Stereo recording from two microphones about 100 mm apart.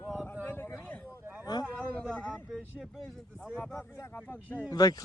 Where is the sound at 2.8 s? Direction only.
Centre (ahead or behind).